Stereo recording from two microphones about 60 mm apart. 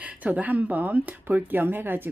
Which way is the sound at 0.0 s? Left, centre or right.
Right.